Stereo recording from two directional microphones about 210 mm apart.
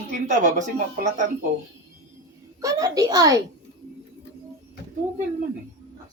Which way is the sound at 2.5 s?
15° right (ahead or behind).